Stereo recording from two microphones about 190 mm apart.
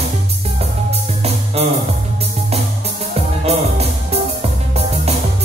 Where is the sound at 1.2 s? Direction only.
35° right (ahead or behind).